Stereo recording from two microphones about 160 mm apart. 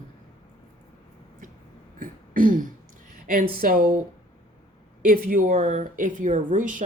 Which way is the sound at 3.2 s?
60° right (ahead or behind).